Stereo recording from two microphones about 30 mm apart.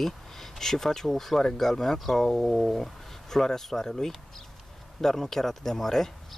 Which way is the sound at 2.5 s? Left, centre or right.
Centre.